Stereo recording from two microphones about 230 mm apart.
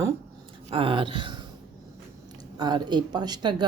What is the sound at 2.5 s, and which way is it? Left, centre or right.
Speech, centre.